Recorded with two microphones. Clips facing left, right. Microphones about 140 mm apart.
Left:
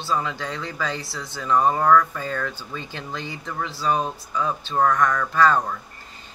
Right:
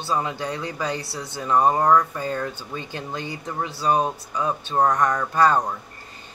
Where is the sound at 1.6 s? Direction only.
35° right (ahead or behind).